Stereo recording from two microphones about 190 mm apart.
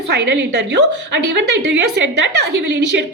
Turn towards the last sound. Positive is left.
turn(degrees=-65)  # may be behind; listen again after turning